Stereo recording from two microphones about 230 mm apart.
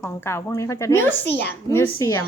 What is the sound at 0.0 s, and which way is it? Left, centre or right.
Speech, centre.